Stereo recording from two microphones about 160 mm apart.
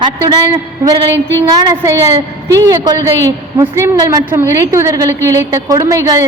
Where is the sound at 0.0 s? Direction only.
30° right (ahead or behind).